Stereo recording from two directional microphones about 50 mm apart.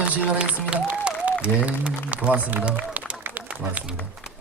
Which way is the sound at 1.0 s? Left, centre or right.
Right.